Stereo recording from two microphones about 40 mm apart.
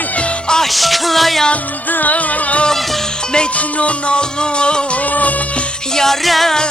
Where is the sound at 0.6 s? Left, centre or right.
Centre.